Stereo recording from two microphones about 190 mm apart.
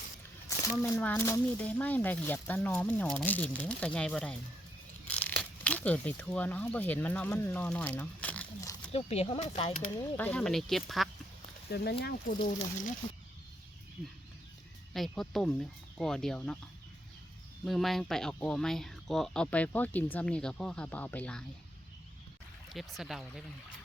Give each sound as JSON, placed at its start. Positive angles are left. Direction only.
{"t": 0.8, "sound": "speech", "side_deg": 10}
{"t": 8.9, "sound": "speech", "side_deg": 30}
{"t": 10.0, "sound": "speech", "side_deg": 10}
{"t": 11.7, "sound": "speech", "side_deg": 60}
{"t": 14.9, "sound": "speech", "side_deg": 0}
{"t": 17.7, "sound": "speech", "side_deg": 0}
{"t": 22.7, "sound": "speech", "side_deg": 0}